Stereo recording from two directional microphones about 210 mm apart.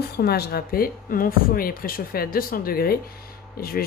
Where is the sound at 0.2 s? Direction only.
45° left (ahead or behind).